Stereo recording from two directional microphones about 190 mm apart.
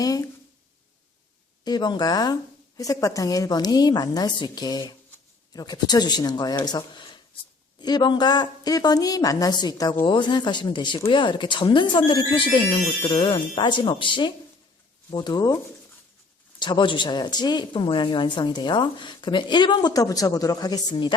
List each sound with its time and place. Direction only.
0.0 s a woman's voice: 20° left (ahead or behind)
1.6 s a woman's voice: 20° left (ahead or behind)